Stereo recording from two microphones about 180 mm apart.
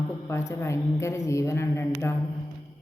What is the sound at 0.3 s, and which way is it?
A woman's voice, 15° left (ahead or behind).